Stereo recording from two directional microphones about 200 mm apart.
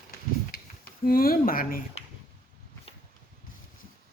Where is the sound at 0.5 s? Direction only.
45° left (ahead or behind).